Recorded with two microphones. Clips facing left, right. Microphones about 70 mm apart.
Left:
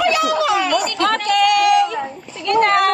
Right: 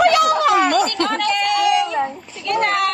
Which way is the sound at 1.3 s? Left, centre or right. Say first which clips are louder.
Left 5 dB; left.